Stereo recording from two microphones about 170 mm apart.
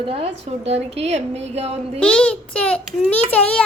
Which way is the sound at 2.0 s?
5° left (ahead or behind).